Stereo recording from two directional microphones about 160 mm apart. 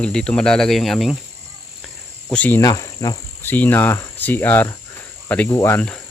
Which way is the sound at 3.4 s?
10° left (ahead or behind).